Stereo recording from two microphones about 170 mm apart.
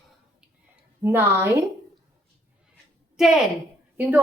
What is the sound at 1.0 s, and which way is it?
Speech, 15° right (ahead or behind).